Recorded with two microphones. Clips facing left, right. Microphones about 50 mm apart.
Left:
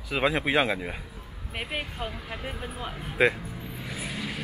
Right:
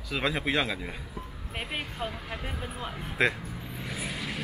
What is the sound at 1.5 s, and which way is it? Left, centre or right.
Speech, centre.